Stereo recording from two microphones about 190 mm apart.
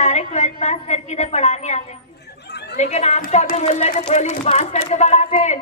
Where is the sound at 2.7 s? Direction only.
35° left (ahead or behind).